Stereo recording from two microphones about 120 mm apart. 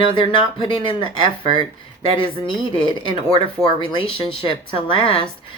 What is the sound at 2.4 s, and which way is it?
Speech, 45° left (ahead or behind).